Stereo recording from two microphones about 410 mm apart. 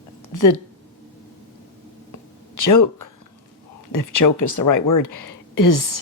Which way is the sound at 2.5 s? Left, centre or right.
Left.